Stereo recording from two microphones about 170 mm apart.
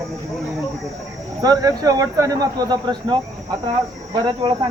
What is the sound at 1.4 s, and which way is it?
Speech, 20° right (ahead or behind).